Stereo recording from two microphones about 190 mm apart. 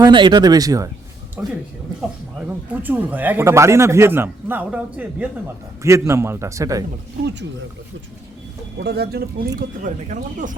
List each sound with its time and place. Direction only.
0.0 s a man's voice: 25° right (ahead or behind); by 1.5 s 10° right (ahead or behind)
2.8 s a man's voice: 10° right (ahead or behind)
8.8 s speech: 55° right (ahead or behind)
9.6 s speech: 45° right (ahead or behind)